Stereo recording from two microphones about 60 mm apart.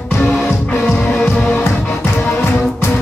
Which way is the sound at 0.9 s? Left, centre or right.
Left.